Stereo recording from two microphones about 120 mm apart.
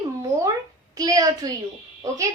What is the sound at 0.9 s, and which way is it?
Speech, 30° right (ahead or behind).